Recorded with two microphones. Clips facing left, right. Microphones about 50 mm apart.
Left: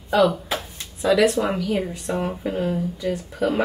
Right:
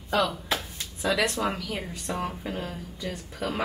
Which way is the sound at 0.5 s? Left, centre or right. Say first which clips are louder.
Left 2 dB; centre.